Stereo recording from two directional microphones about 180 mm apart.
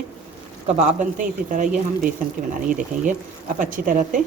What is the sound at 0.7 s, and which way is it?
Speech, 40° right (ahead or behind).